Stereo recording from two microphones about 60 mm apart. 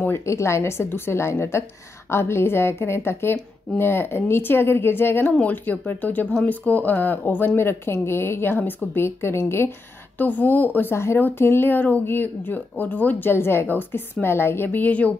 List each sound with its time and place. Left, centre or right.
0.3 s a woman's voice: left
5.2 s a woman's voice: left
10.1 s speech: left
10.8 s a woman's voice: left